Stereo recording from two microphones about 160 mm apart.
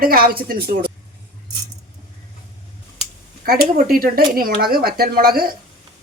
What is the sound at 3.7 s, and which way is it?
Speech, 65° right (ahead or behind).